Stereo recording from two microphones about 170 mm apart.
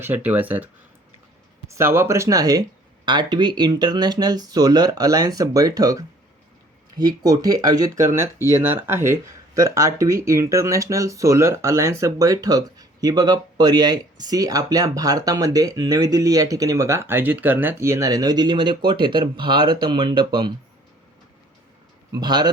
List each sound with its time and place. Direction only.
0.0 s speech: 10° right (ahead or behind); by 20.5 s 25° right (ahead or behind)
22.1 s speech: 25° right (ahead or behind)